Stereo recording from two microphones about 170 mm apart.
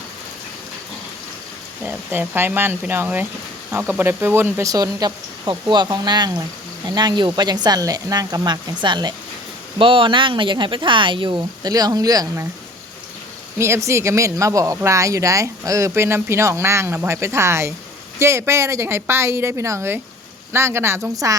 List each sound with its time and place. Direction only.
1.8 s speech: 10° right (ahead or behind)
13.6 s speech: 15° right (ahead or behind)